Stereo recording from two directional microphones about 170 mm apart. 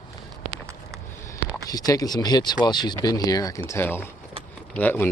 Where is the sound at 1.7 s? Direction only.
20° left (ahead or behind).